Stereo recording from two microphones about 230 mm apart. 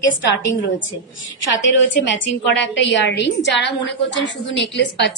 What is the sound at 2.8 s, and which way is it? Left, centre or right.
A woman's voice, left.